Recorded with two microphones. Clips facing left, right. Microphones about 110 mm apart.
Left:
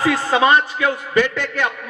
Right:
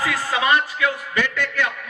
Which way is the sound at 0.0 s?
30° left (ahead or behind).